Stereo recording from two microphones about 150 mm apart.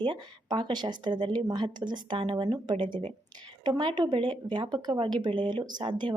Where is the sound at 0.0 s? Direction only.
30° right (ahead or behind).